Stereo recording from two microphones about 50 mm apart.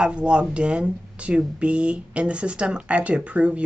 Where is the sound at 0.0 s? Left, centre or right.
Right.